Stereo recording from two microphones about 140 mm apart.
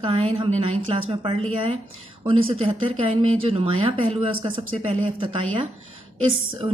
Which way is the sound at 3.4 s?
40° right (ahead or behind).